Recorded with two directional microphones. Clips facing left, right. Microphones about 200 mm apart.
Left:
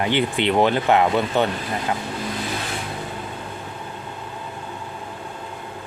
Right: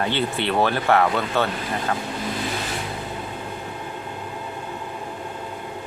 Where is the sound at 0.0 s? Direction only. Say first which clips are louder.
Left 3 dB; 15° left (ahead or behind).